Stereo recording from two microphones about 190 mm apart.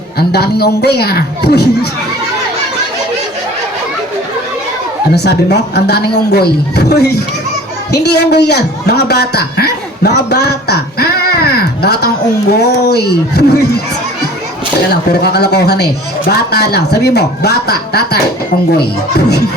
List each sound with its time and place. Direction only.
0.2 s a man's voice: 55° left (ahead or behind)
5.1 s a man's voice: 60° left (ahead or behind)
14.8 s a man's voice: 55° left (ahead or behind)